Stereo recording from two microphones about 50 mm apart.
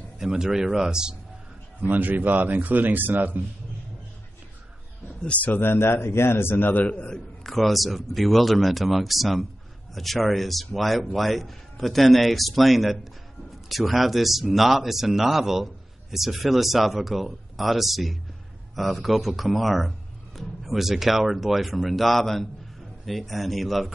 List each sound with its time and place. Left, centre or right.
0.2 s speech: centre
1.8 s speech: right
5.2 s a man's voice: left
5.5 s speech: left
6.5 s a man's voice: left
7.4 s speech: centre